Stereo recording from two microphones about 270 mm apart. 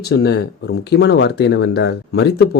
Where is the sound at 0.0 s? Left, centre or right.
Left.